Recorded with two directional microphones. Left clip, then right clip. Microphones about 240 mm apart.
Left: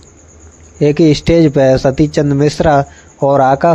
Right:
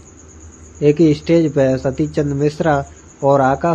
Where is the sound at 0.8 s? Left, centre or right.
Left.